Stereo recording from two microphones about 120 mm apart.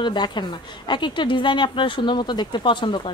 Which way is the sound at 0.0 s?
40° left (ahead or behind).